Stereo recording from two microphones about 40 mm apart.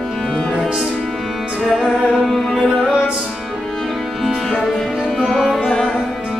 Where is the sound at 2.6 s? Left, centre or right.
Left.